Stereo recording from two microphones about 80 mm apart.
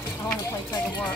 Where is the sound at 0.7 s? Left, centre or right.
Left.